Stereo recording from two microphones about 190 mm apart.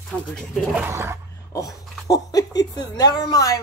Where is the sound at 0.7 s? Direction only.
15° right (ahead or behind).